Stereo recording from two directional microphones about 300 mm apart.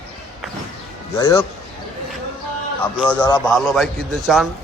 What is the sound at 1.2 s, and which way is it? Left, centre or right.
Speech, centre.